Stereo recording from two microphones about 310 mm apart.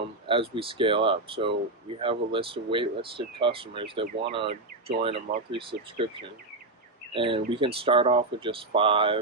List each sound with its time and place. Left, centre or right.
0.3 s speech: centre